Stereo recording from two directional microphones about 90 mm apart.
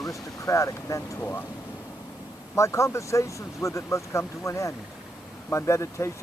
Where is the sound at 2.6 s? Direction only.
35° left (ahead or behind).